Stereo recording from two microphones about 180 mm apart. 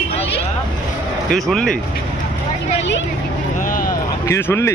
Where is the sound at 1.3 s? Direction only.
Centre (ahead or behind).